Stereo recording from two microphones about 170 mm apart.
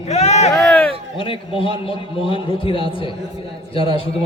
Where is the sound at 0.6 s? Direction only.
5° left (ahead or behind).